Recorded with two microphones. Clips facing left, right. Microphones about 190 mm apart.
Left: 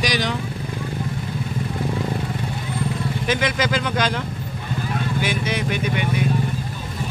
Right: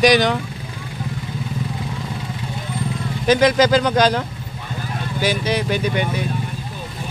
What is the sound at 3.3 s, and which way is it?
Speech, 40° right (ahead or behind).